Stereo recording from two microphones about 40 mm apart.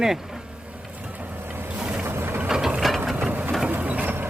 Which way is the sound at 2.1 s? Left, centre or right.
Right.